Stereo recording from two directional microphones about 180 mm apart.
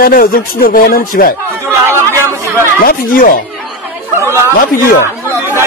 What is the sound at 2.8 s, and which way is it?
Speech, 50° left (ahead or behind).